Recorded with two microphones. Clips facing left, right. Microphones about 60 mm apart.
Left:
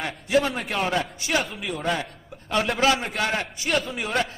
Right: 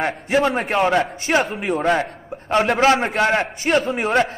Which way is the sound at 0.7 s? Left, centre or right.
Right.